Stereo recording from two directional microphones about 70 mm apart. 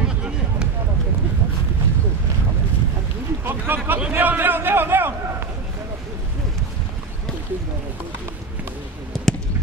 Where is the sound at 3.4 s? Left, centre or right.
Right.